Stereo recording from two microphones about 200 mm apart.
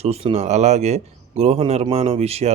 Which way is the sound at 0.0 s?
30° right (ahead or behind).